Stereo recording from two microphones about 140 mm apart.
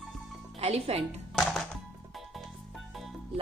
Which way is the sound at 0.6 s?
45° right (ahead or behind).